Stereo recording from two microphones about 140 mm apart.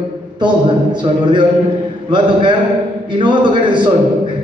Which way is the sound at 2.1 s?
35° right (ahead or behind).